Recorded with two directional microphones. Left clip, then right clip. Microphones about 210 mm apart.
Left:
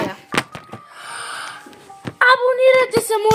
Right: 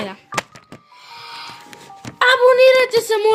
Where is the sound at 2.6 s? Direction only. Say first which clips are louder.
Right 1 dB; 30° right (ahead or behind).